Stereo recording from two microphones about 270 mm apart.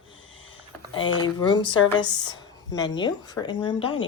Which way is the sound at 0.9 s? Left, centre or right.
Centre.